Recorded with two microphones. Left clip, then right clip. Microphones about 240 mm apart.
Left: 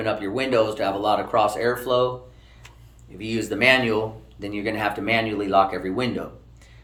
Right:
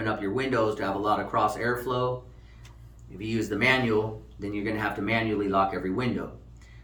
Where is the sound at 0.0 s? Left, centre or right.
Centre.